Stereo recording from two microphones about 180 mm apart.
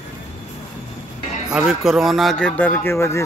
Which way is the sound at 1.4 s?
5° right (ahead or behind).